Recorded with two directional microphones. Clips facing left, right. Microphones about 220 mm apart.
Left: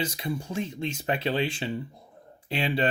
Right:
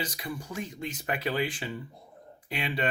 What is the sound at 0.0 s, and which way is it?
Speech, 25° left (ahead or behind).